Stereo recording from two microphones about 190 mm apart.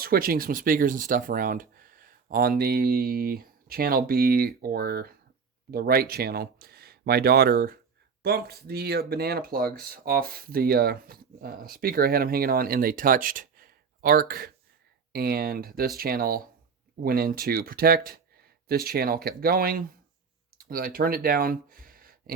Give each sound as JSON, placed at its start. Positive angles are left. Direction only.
{"t": 0.0, "sound": "speech", "side_deg": -50}